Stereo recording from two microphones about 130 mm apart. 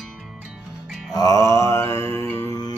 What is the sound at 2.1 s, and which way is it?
Music, 20° left (ahead or behind).